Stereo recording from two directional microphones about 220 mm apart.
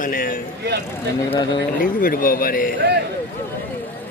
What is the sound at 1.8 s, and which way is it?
Speech, 40° left (ahead or behind).